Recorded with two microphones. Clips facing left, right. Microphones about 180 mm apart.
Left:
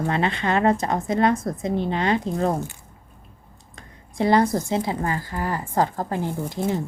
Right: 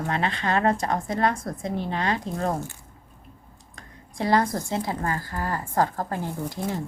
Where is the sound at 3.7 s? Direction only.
25° left (ahead or behind).